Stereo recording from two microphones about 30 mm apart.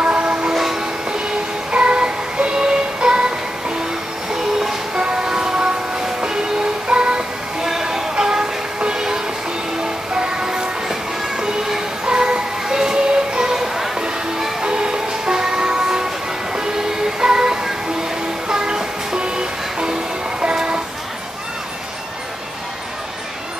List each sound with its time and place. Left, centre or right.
0.0 s music: right
1.7 s music: right
4.9 s music: right
6.9 s music: right
7.6 s music: centre
12.1 s music: right
14.6 s music: right
17.2 s music: right